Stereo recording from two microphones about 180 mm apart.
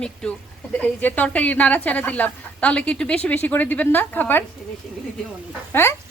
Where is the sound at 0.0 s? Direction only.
5° left (ahead or behind).